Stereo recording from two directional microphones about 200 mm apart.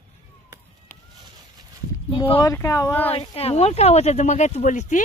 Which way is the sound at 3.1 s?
30° left (ahead or behind).